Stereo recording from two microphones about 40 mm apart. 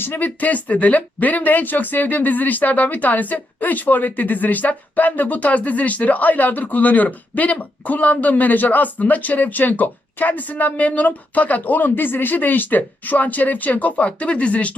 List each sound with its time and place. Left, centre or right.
0.0 s speech: left
0.3 s speech: left